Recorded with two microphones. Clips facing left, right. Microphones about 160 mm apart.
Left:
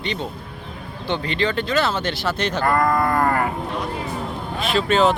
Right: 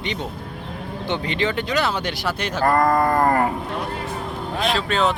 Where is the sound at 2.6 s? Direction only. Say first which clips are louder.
Right 2 dB; 35° right (ahead or behind).